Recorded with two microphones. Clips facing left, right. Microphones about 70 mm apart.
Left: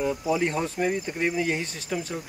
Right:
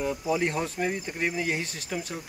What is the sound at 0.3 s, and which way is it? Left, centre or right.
Speech, centre.